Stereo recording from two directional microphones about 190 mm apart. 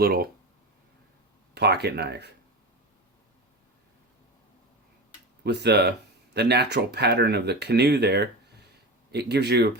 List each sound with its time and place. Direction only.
0.0 s speech: 55° right (ahead or behind)
1.5 s speech: 60° right (ahead or behind)
5.4 s speech: 60° right (ahead or behind)